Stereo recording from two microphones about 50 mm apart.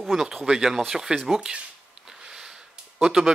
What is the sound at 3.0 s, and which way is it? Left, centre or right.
Speech, centre.